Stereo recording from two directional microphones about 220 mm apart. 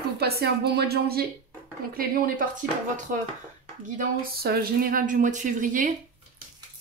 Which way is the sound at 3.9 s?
45° right (ahead or behind).